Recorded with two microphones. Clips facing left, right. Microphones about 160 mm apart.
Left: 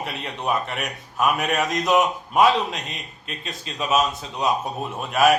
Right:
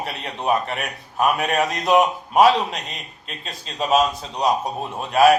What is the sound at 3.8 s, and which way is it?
A man's voice, 35° right (ahead or behind).